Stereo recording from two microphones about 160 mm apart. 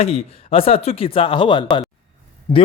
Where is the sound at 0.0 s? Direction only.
40° left (ahead or behind).